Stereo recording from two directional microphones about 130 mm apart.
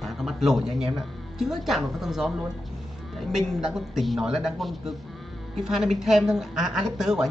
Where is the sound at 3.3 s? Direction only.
5° right (ahead or behind).